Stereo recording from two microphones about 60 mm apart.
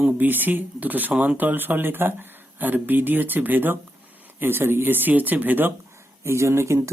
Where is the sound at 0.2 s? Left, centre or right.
Right.